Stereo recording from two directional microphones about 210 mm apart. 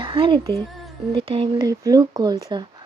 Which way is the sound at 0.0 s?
25° right (ahead or behind).